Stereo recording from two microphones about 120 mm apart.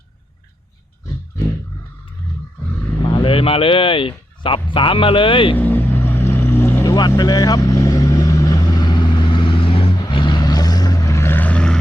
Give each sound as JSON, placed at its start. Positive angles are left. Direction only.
{"t": 3.1, "sound": "speech", "side_deg": 45}
{"t": 5.5, "sound": "vehicle", "side_deg": 15}
{"t": 6.8, "sound": "vehicle", "side_deg": 35}
{"t": 7.2, "sound": "speech", "side_deg": 30}
{"t": 7.7, "sound": "vehicle", "side_deg": 30}